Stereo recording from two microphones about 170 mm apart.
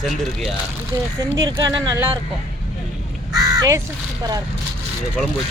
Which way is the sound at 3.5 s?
15° right (ahead or behind).